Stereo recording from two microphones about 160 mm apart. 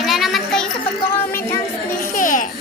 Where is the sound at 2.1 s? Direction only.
55° left (ahead or behind).